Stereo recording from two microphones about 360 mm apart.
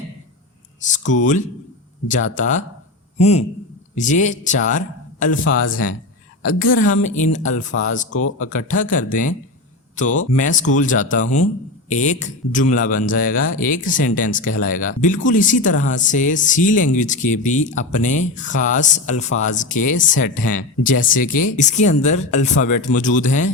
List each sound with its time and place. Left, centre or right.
0.8 s a man's voice: left